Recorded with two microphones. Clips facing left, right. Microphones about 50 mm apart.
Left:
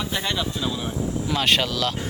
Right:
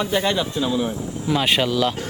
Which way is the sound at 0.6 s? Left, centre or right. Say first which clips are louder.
Right 4 dB; centre.